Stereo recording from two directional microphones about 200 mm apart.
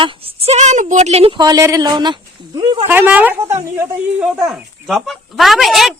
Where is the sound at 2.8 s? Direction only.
10° right (ahead or behind).